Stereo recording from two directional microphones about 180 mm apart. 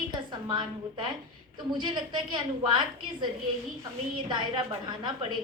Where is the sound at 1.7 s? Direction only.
25° right (ahead or behind).